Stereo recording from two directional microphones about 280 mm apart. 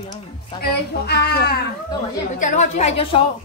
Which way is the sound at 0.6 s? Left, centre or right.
Left.